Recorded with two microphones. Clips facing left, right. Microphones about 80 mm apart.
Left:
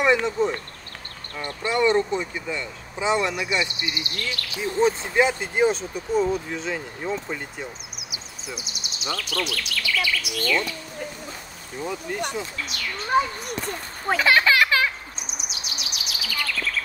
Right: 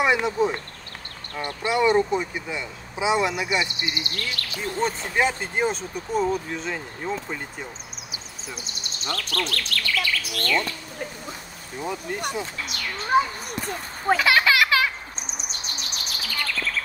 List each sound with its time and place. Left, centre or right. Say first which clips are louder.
0.0 s speech: left 1 dB; centre
1.7 s speech: right 1 dB; centre
3.8 s speech: even; right
4.6 s speech: left 5 dB; centre
11.8 s speech: even; centre
14.2 s children playing: left 3 dB; left
15.2 s bird: right 1 dB; centre